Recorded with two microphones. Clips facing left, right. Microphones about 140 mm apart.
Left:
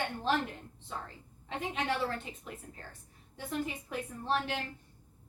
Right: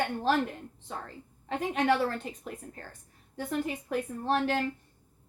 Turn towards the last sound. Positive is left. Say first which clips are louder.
# right 5 dB
turn(degrees=-45)  # may be behind; listen again after turning